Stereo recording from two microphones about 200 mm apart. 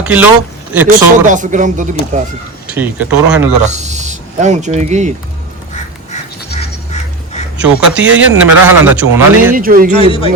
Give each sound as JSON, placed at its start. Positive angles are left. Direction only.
{"t": 0.0, "sound": "speech", "side_deg": -10}
{"t": 0.9, "sound": "speech", "side_deg": -40}
{"t": 2.7, "sound": "speech", "side_deg": -10}
{"t": 3.7, "sound": "speech", "side_deg": -35}
{"t": 7.6, "sound": "a man's voice", "side_deg": -5}
{"t": 9.6, "sound": "speech", "side_deg": -45}
{"t": 9.9, "sound": "speech", "side_deg": 25}